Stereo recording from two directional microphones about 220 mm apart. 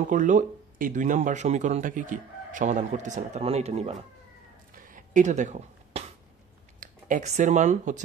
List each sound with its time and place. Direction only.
0.0 s speech: 35° right (ahead or behind)
4.7 s a sound: 40° right (ahead or behind)
6.8 s speech: 35° right (ahead or behind)